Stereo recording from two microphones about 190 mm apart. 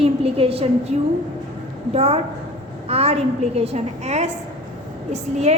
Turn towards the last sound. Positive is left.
turn(degrees=-35)  # may be behind; listen again after turning